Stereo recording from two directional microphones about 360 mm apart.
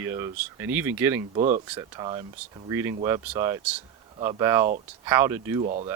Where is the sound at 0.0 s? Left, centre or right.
Centre.